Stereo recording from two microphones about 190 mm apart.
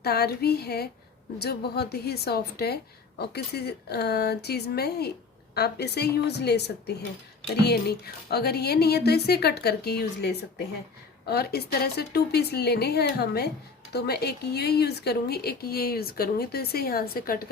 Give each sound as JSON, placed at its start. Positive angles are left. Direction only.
{"t": 0.0, "sound": "a woman's voice", "side_deg": 55}